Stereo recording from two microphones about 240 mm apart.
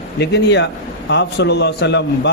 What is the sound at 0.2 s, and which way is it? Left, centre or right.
A man's voice, left.